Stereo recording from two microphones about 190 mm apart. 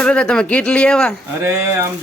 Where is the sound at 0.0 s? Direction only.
5° left (ahead or behind).